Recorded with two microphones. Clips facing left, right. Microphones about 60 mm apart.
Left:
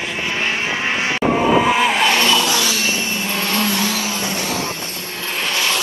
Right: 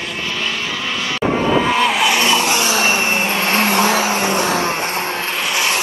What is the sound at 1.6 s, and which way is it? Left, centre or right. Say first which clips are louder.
Vehicle: even; centre.